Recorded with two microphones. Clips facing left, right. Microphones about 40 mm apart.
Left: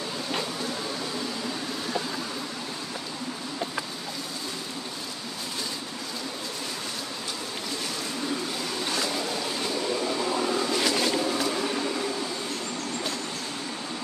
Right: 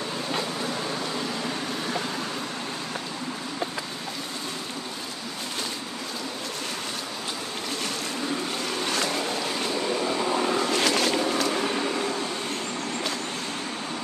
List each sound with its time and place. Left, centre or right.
10.3 s vehicle: right